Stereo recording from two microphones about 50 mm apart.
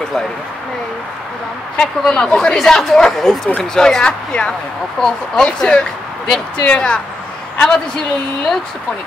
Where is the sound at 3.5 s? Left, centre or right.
Centre.